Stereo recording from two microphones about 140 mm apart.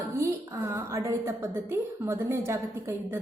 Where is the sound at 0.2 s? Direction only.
20° right (ahead or behind).